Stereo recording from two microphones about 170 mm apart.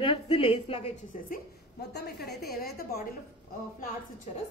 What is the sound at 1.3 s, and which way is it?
A woman's voice, 75° left (ahead or behind).